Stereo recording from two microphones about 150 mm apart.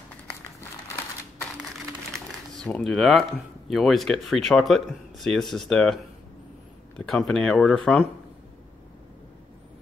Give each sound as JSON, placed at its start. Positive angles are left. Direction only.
{"t": 2.1, "sound": "speech", "side_deg": 5}
{"t": 7.1, "sound": "speech", "side_deg": 0}